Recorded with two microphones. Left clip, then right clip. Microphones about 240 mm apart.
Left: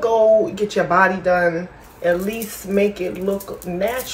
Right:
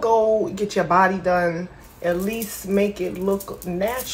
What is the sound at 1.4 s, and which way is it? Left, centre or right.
Speech, centre.